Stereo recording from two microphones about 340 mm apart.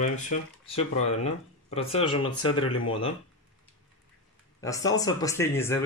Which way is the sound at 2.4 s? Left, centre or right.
Centre.